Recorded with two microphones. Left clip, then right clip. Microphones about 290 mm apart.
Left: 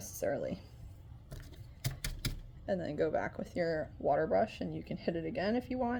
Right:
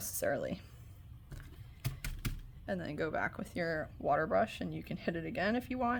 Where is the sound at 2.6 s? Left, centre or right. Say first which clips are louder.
Left 4 dB; centre.